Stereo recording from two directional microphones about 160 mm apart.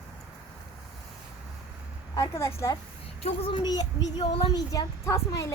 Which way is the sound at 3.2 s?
35° left (ahead or behind).